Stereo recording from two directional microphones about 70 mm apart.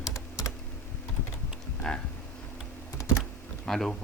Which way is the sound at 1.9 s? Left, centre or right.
Centre.